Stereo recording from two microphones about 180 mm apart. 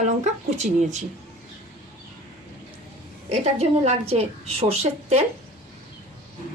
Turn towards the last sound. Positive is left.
turn(degrees=-35)  # may be behind; listen again after turning